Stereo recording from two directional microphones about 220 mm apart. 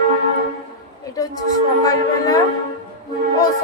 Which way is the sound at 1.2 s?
15° left (ahead or behind).